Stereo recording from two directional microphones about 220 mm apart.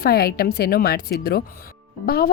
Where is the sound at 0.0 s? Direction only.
45° left (ahead or behind).